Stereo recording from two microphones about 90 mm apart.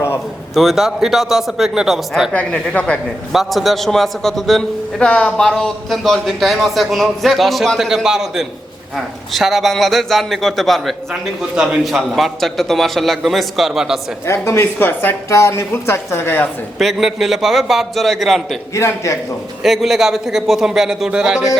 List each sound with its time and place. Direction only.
0.5 s a man's voice: centre (ahead or behind)
2.3 s a woman's voice: 15° left (ahead or behind)
3.3 s a man's voice: centre (ahead or behind)
4.9 s a man's voice: 10° left (ahead or behind)
14.3 s speech: 30° left (ahead or behind)
16.7 s a man's voice: 5° right (ahead or behind)
18.7 s speech: 35° left (ahead or behind)
19.6 s a man's voice: centre (ahead or behind)